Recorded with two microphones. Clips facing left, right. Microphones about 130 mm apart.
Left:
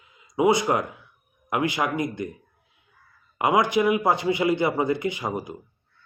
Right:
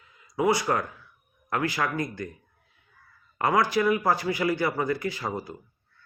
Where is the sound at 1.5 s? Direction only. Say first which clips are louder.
Left 3 dB; 20° left (ahead or behind).